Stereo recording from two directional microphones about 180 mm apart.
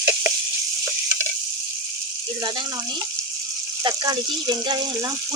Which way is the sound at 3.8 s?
25° right (ahead or behind).